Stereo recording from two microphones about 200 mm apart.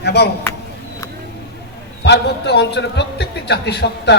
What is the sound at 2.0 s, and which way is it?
A man's voice, 60° left (ahead or behind).